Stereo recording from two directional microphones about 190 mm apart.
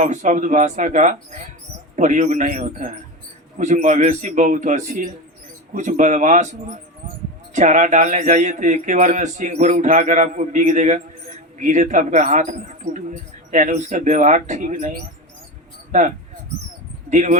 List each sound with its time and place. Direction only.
0.0 s speech: 40° right (ahead or behind)